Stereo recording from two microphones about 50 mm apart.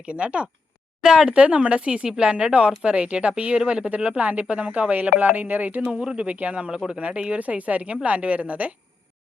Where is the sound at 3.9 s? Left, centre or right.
Right.